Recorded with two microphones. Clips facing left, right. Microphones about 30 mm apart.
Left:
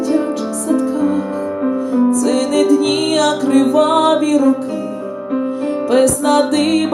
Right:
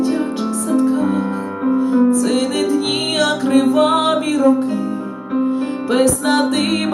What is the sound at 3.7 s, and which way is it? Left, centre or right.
Music, right.